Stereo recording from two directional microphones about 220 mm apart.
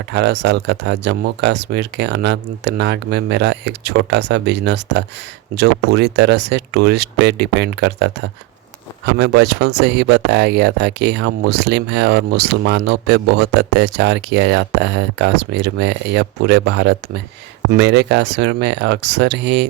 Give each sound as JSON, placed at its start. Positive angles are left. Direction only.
{"t": 0.1, "sound": "speech", "side_deg": -50}